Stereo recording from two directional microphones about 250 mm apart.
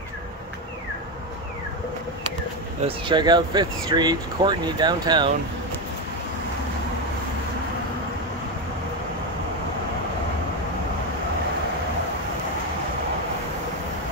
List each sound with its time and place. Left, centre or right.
2.8 s speech: centre